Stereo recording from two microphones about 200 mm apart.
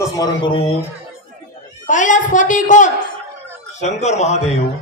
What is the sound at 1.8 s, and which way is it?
A woman's voice, 40° left (ahead or behind).